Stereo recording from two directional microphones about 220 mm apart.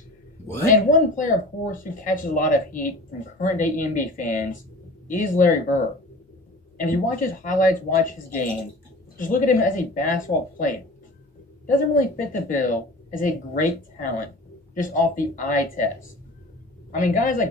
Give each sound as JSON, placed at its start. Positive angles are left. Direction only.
{"t": 0.8, "sound": "speech", "side_deg": 35}
{"t": 6.8, "sound": "speech", "side_deg": 35}
{"t": 16.9, "sound": "speech", "side_deg": 40}